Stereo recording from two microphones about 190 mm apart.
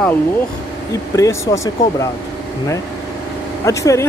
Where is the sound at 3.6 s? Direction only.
15° left (ahead or behind).